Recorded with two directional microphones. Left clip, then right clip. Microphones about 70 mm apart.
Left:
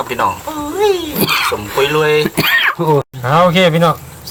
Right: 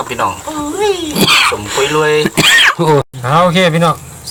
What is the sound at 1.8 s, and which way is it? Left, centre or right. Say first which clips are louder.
Speech: right 1 dB; left.